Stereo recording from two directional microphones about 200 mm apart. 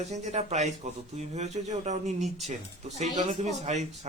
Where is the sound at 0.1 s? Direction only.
35° right (ahead or behind).